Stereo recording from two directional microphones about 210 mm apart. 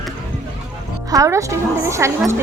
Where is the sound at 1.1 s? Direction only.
15° right (ahead or behind).